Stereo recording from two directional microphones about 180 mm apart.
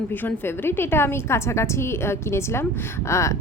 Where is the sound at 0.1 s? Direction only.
10° left (ahead or behind).